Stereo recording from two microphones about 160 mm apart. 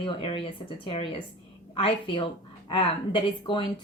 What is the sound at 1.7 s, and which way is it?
Speech, 30° left (ahead or behind).